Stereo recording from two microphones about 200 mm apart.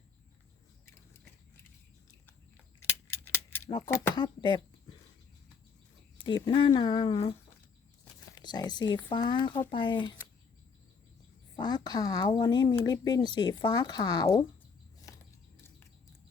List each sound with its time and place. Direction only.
3.3 s speech: 10° left (ahead or behind)
6.1 s speech: 25° left (ahead or behind)
8.2 s a sound: 20° left (ahead or behind)
9.0 s speech: 25° left (ahead or behind)
11.5 s speech: 20° left (ahead or behind)
15.1 s a sound: 15° left (ahead or behind)